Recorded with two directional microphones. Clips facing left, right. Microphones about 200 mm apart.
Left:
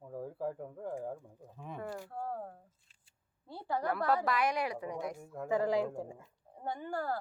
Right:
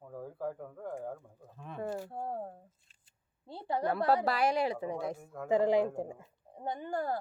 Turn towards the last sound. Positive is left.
turn(degrees=-20)  # may be behind; listen again after turning